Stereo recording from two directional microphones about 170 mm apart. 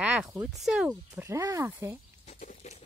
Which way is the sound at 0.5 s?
5° right (ahead or behind).